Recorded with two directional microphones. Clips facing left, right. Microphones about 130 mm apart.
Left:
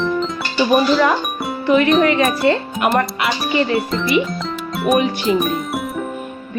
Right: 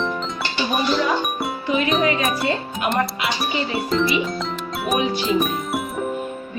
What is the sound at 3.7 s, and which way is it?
Speech, centre (ahead or behind).